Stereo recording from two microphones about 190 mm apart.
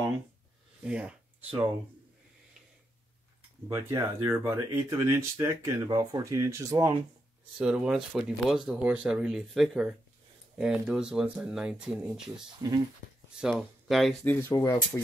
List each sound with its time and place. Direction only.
0.8 s speech: 5° right (ahead or behind)
3.6 s speech: 15° right (ahead or behind); by 14.4 s 5° left (ahead or behind)
14.5 s speech: 20° left (ahead or behind)